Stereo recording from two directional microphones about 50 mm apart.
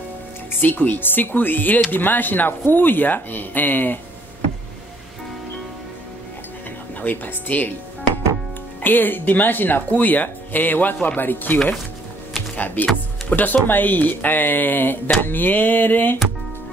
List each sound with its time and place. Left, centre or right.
0.5 s speech: left
7.0 s speech: left
8.8 s speech: left